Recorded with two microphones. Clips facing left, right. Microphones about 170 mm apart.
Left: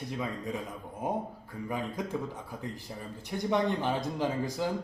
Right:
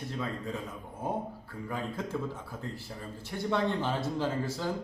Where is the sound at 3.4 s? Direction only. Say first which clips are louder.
Left 1 dB; 15° left (ahead or behind).